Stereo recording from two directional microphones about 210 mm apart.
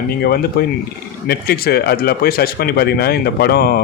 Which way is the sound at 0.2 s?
45° left (ahead or behind).